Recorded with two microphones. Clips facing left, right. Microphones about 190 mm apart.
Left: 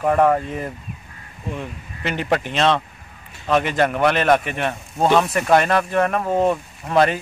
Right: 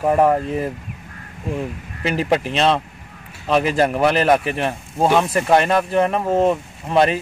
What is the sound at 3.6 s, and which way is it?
Speech, 35° right (ahead or behind).